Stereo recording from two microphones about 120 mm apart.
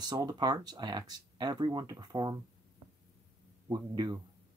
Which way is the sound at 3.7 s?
35° right (ahead or behind).